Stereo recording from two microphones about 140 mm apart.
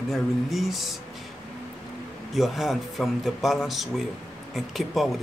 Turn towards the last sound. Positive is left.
turn(degrees=0)  # may be behind; listen again after turning